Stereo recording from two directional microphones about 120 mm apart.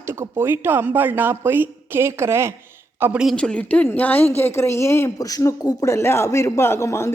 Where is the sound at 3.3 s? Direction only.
10° left (ahead or behind).